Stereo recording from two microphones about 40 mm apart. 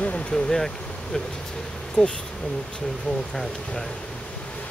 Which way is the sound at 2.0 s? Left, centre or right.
Left.